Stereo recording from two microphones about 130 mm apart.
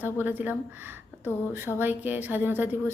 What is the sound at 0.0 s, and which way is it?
A woman's voice, 15° right (ahead or behind).